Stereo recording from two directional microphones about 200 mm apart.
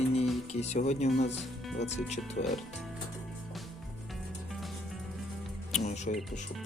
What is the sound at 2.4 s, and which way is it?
Speech, 45° left (ahead or behind).